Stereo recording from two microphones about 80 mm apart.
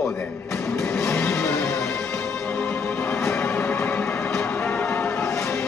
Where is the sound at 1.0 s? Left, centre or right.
Centre.